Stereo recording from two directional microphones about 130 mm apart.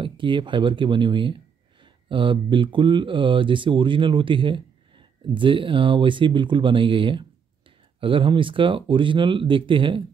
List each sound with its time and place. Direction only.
0.0 s speech: 40° right (ahead or behind)